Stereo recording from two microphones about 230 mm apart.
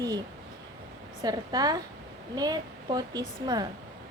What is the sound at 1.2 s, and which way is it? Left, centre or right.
A woman's voice, centre.